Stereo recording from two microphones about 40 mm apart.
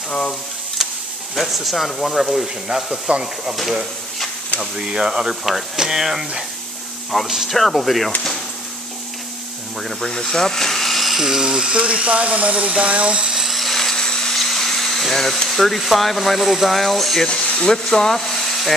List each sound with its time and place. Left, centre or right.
0.1 s speech: left
0.8 s stir: centre
1.3 s speech: centre
4.7 s speech: centre
5.3 s speech: centre
7.4 s speech: centre
9.8 s speech: centre
11.2 s speech: centre
11.7 s speech: right
13.3 s dental drill: centre
13.9 s a sound: centre
14.3 s speech: centre
17.3 s a sound: left
17.6 s speech: centre